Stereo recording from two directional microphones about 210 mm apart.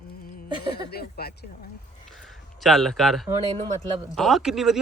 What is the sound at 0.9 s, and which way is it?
Speech, 50° left (ahead or behind).